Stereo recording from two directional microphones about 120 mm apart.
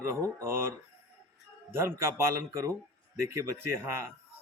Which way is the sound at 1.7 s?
20° right (ahead or behind).